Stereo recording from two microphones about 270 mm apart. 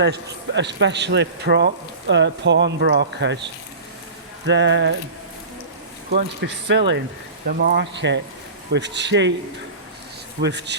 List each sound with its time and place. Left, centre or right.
0.0 s a man's voice: right
6.1 s a man's voice: right
10.4 s a man's voice: right